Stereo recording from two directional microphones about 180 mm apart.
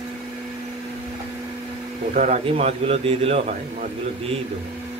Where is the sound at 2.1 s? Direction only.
40° right (ahead or behind).